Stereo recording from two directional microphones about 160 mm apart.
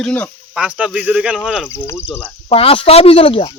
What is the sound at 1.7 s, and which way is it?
Speech, 15° left (ahead or behind).